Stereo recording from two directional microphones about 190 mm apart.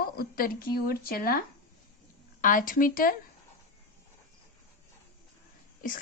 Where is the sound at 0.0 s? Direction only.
50° left (ahead or behind).